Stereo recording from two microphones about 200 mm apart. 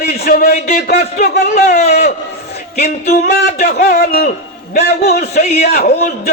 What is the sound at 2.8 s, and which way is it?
A man's voice, 50° left (ahead or behind).